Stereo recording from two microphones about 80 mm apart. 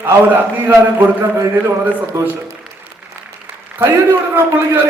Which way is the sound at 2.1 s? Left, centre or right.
Right.